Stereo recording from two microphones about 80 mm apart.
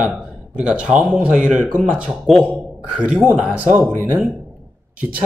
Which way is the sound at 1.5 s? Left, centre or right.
Centre.